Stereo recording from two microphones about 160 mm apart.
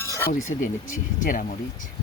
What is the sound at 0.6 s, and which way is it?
Speech, 55° left (ahead or behind).